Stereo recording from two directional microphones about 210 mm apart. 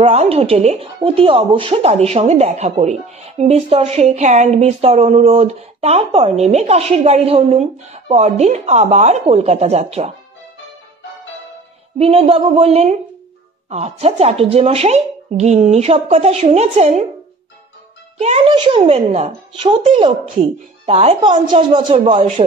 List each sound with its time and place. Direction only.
0.0 s speech: 30° right (ahead or behind)
12.0 s speech: 30° right (ahead or behind)
18.2 s speech: 30° right (ahead or behind)